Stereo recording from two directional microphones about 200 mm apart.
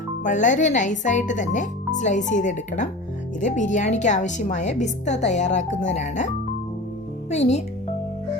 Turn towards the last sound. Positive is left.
turn(degrees=35)  # may be behind; listen again after turning